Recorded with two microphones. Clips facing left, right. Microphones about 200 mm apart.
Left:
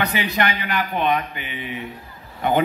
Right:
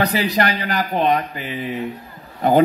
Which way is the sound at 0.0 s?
35° right (ahead or behind).